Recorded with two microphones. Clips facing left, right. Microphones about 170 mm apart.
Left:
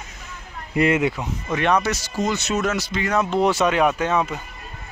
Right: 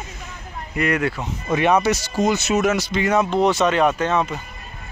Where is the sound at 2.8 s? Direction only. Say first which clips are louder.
Right 4 dB; 20° right (ahead or behind).